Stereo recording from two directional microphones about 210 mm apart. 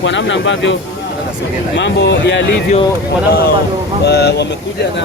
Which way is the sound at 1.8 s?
55° left (ahead or behind).